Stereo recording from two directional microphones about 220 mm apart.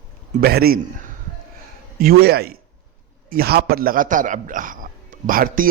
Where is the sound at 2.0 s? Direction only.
45° right (ahead or behind).